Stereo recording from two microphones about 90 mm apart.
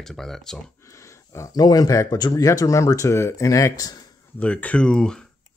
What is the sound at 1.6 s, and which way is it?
Speech, 45° left (ahead or behind).